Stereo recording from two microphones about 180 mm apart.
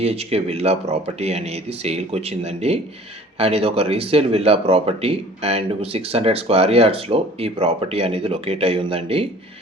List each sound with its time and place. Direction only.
0.0 s speech: 35° right (ahead or behind)